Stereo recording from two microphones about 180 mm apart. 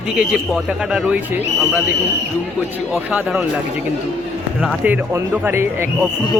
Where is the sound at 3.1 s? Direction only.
5° right (ahead or behind).